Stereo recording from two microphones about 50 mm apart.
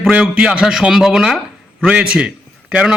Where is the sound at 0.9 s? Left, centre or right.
Centre.